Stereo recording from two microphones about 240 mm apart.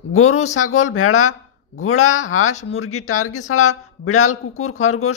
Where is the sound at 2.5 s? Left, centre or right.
Left.